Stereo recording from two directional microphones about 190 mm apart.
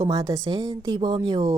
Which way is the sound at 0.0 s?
20° right (ahead or behind).